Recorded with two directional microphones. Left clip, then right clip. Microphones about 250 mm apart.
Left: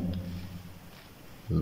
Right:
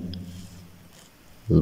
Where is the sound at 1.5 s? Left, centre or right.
Right.